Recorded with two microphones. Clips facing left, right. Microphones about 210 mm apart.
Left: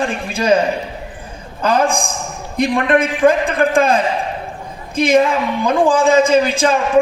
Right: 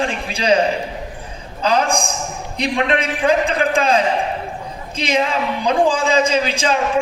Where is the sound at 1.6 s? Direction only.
50° left (ahead or behind).